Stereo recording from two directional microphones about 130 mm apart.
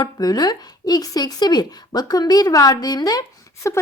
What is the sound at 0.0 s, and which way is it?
Speech, 30° left (ahead or behind).